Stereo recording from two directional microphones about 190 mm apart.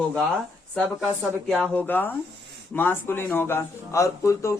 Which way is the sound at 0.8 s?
Centre (ahead or behind).